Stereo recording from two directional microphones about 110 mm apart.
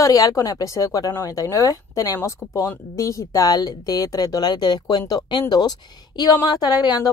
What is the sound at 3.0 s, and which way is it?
A woman's voice, 30° left (ahead or behind).